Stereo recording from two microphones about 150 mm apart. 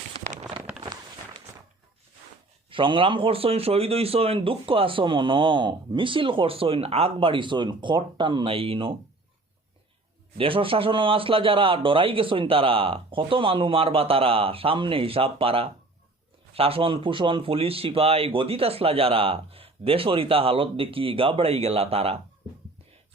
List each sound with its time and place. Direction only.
2.6 s a man's voice: 35° right (ahead or behind)
10.3 s a man's voice: 35° right (ahead or behind)